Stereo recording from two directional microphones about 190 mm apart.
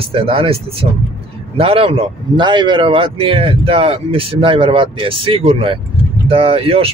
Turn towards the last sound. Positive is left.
turn(degrees=-30)  # may be behind; listen again after turning